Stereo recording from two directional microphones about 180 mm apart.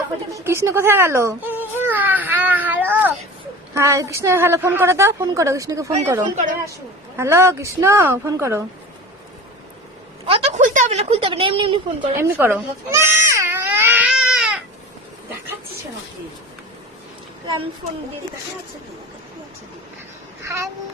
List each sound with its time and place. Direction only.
0.3 s baby cry: 15° right (ahead or behind)
3.8 s a woman's voice: 15° right (ahead or behind)
10.2 s a woman's voice: 35° right (ahead or behind)
12.1 s baby cry: 15° right (ahead or behind)
20.4 s a sound: 15° right (ahead or behind)